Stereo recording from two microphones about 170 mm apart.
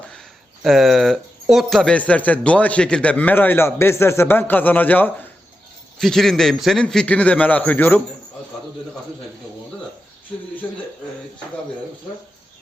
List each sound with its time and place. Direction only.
0.6 s a man's voice: centre (ahead or behind)
10.3 s a man's voice: 5° left (ahead or behind)